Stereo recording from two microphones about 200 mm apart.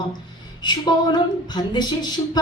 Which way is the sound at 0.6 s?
20° left (ahead or behind).